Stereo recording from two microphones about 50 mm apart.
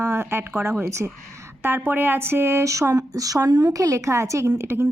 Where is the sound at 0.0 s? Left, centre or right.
Right.